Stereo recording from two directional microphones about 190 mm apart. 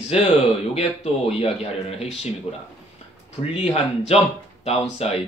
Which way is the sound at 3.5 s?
35° left (ahead or behind).